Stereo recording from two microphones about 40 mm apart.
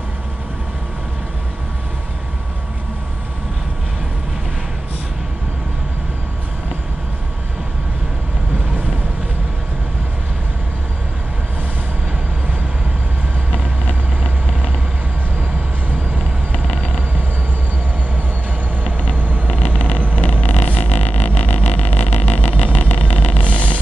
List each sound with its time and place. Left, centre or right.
20.2 s vehicle: left